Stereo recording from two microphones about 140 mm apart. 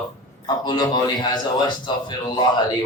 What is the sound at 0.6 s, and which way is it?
A man's voice, 30° left (ahead or behind).